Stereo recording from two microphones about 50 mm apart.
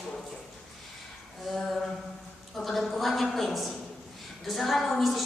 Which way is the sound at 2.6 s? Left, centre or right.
Centre.